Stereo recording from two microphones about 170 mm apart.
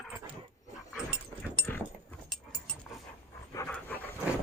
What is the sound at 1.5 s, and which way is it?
Dog, 10° left (ahead or behind).